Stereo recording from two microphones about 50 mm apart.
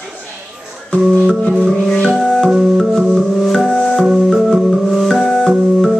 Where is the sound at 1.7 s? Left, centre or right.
Centre.